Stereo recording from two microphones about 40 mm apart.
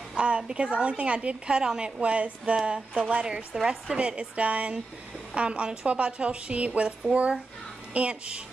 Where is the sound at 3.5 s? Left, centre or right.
Centre.